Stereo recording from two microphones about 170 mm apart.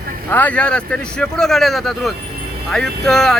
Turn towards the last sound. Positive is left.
turn(degrees=5)  # may be behind; listen again after turning